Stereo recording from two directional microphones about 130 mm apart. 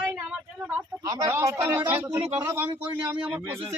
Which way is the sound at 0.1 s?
5° right (ahead or behind).